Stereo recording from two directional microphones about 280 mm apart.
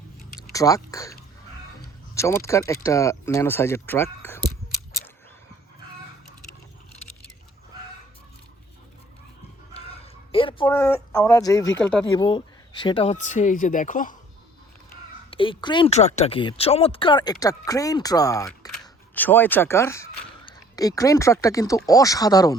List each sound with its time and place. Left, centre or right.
0.5 s speech: centre
2.1 s speech: centre
9.7 s a sound: centre
12.0 s speech: centre
15.3 s speech: centre